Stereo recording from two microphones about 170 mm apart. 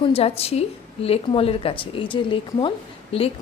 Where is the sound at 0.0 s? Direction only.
35° left (ahead or behind).